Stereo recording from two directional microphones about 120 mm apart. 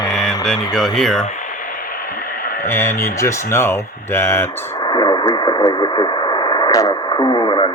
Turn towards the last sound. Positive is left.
turn(degrees=40)  # may be behind; listen again after turning